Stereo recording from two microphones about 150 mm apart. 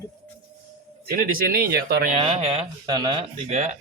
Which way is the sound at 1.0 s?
75° right (ahead or behind).